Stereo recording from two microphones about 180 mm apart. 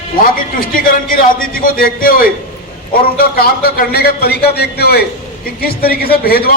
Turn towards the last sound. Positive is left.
turn(degrees=55)  # may be behind; listen again after turning